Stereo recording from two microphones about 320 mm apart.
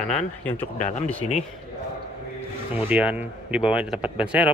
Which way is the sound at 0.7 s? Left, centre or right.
Left.